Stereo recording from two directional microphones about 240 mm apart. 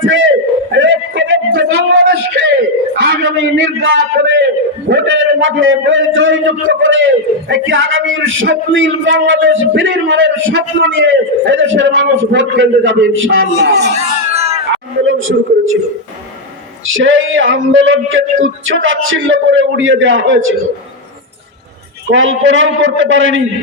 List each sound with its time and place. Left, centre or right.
0.0 s a sound: right
2.9 s a sound: right
4.4 s a man's voice: right
14.0 s cat: right
15.0 s a man's voice: right
16.8 s a man's voice: right
22.1 s a man's voice: right